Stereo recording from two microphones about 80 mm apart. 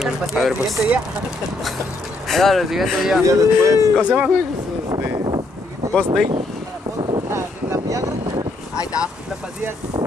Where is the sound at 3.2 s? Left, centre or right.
Right.